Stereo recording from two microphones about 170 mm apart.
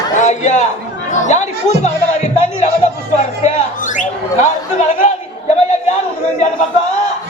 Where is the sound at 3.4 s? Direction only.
50° left (ahead or behind).